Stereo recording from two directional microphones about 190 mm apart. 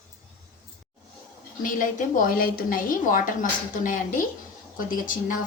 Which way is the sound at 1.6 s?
45° left (ahead or behind).